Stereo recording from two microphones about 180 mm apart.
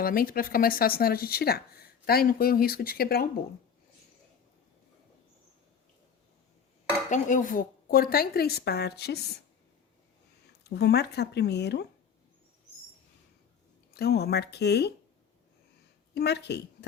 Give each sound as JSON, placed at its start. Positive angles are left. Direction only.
{"t": 0.0, "sound": "a woman's voice", "side_deg": 55}
{"t": 7.1, "sound": "a woman's voice", "side_deg": 45}
{"t": 10.6, "sound": "speech", "side_deg": 65}
{"t": 13.9, "sound": "a woman's voice", "side_deg": 60}
{"t": 16.1, "sound": "a woman's voice", "side_deg": 65}